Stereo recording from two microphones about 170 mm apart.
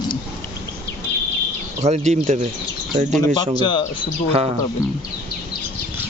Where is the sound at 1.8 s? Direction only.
40° right (ahead or behind).